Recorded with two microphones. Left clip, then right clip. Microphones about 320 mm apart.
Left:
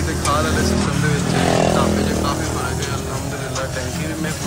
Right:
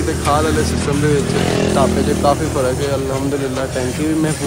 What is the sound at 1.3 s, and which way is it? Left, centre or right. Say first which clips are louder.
Speech: even; left.